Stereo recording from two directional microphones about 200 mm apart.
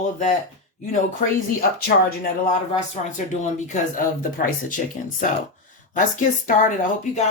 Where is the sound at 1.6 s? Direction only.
50° left (ahead or behind).